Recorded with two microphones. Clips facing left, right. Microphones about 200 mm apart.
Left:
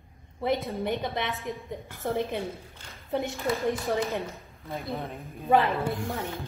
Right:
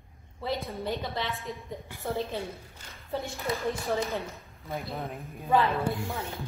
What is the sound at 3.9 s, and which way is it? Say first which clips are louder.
Speech: left 2 dB; 15° left (ahead or behind).